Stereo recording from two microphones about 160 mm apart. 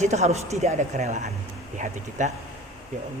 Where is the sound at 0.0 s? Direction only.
45° right (ahead or behind).